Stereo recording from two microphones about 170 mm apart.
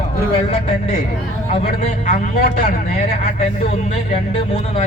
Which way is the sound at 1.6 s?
55° left (ahead or behind).